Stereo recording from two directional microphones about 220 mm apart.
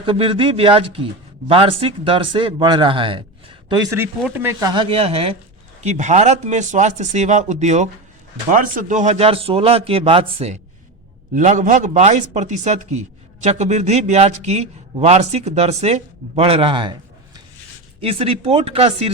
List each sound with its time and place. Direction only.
0.0 s speech: 25° right (ahead or behind)
4.7 s speech: 25° right (ahead or behind)